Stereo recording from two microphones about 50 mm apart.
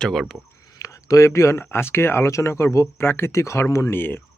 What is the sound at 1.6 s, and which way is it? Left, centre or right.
Speech, left.